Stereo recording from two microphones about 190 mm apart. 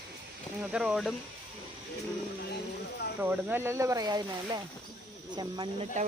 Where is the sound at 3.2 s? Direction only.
10° right (ahead or behind).